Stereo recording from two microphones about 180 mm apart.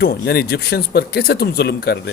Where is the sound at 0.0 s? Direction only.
65° left (ahead or behind).